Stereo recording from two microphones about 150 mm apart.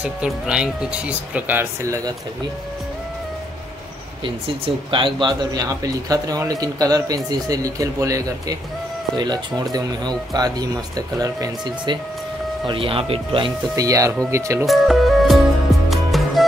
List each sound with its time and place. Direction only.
0.0 s speech: 5° right (ahead or behind)
4.2 s speech: 35° right (ahead or behind)
13.7 s speech: 20° right (ahead or behind)
14.7 s music: centre (ahead or behind)